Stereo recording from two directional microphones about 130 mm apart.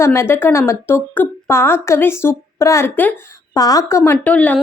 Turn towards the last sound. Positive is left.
turn(degrees=10)  # may be behind; listen again after turning